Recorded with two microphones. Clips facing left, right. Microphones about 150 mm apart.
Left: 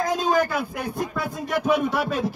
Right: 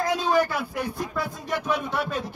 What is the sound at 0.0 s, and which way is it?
A man's voice, 45° left (ahead or behind).